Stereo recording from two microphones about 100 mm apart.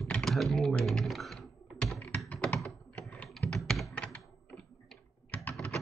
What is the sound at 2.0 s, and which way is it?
Typing, 15° left (ahead or behind).